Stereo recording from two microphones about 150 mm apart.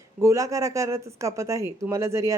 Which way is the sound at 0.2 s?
20° right (ahead or behind).